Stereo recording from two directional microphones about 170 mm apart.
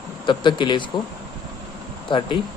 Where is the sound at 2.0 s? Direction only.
30° left (ahead or behind).